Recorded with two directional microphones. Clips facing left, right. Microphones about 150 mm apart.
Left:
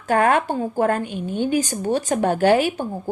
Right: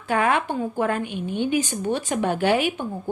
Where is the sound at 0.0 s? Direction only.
40° left (ahead or behind).